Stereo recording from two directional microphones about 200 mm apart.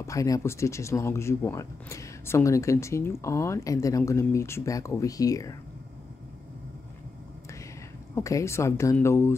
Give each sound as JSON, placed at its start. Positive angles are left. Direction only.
{"t": 0.0, "sound": "speech", "side_deg": 15}
{"t": 8.1, "sound": "speech", "side_deg": 15}